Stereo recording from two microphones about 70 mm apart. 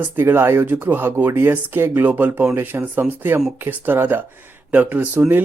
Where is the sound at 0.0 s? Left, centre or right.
Right.